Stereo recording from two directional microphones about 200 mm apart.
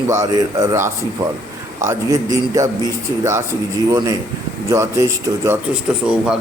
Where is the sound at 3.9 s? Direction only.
15° right (ahead or behind).